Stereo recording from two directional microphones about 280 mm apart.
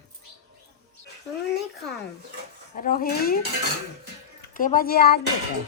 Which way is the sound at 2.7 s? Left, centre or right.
Left.